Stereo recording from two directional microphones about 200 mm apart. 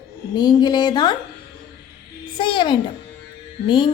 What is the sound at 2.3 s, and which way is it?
Speech, 25° left (ahead or behind).